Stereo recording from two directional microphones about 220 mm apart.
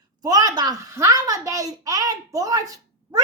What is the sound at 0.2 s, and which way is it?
A child's voice, 15° right (ahead or behind).